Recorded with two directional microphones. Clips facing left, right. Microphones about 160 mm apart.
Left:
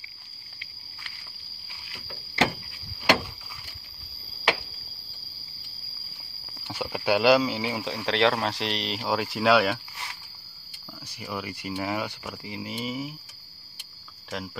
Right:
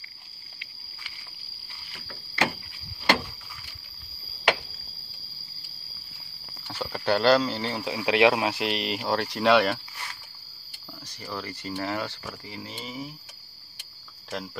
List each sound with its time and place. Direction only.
2.0 s a sound: 20° left (ahead or behind)
6.7 s speech: 10° left (ahead or behind)
7.9 s speech: 10° right (ahead or behind)
11.2 s speech: 10° left (ahead or behind)
14.3 s speech: 5° left (ahead or behind)